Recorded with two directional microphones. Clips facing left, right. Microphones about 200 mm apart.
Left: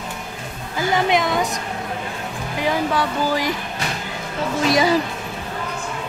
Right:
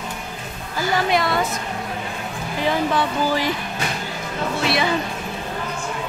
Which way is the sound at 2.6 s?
10° left (ahead or behind).